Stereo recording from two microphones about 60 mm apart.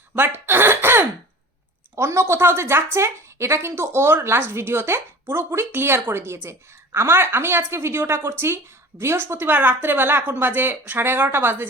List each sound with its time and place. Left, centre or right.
0.2 s throat clearing: right
2.0 s a woman's voice: right